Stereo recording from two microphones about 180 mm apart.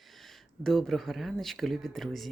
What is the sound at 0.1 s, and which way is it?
Speech, centre (ahead or behind).